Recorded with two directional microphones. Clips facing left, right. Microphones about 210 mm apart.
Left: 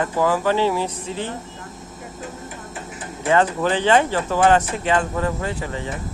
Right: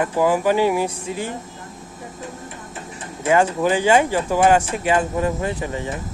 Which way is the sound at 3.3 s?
10° right (ahead or behind).